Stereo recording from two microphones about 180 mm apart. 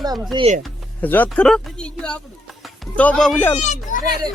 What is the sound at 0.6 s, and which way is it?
Speech, 10° left (ahead or behind).